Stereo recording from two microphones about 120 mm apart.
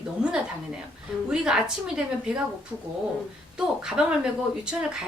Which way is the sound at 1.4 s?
5° right (ahead or behind).